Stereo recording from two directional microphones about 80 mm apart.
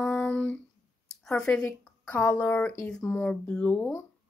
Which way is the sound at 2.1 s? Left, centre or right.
Centre.